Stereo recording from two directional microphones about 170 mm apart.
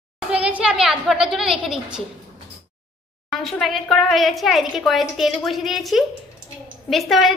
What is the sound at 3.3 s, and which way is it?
Speech, centre (ahead or behind).